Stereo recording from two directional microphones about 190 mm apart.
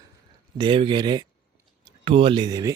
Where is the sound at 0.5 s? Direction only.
25° right (ahead or behind).